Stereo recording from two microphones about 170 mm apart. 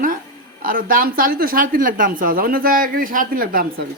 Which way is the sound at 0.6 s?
55° right (ahead or behind).